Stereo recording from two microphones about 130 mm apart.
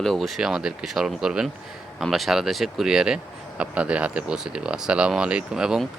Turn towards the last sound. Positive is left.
turn(degrees=-5)  # may be behind; listen again after turning